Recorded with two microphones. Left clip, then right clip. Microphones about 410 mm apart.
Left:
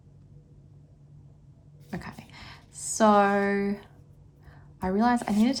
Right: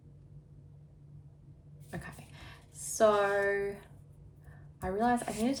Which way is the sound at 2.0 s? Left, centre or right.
Centre.